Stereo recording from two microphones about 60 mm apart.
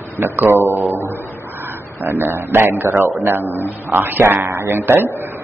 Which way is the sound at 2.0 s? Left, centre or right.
Right.